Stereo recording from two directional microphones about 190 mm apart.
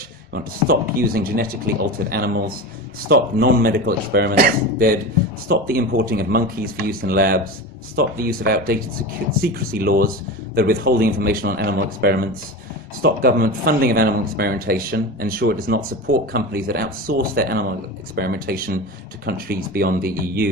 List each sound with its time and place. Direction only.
0.3 s speech: 50° right (ahead or behind)